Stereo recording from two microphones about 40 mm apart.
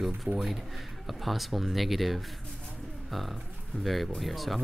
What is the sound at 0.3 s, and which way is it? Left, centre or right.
Speech, right.